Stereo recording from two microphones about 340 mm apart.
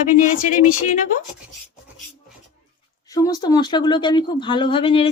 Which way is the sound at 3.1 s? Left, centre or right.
Centre.